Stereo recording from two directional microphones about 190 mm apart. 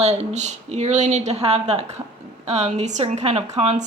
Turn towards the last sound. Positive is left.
turn(degrees=-35)  # may be behind; listen again after turning